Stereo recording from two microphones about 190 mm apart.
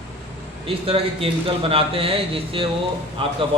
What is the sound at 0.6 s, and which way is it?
A man's voice, 30° right (ahead or behind).